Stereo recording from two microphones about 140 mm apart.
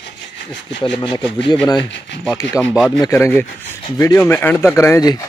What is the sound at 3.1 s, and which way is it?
Speech, 15° left (ahead or behind).